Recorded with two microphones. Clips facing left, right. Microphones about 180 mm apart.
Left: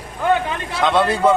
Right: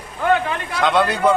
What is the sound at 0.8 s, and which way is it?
Speech, centre (ahead or behind).